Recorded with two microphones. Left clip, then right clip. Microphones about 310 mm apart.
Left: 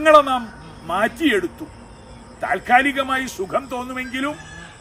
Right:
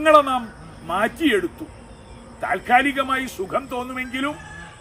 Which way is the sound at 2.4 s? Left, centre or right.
Centre.